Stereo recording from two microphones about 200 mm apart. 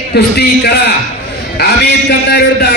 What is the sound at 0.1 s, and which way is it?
A man's voice, 55° left (ahead or behind).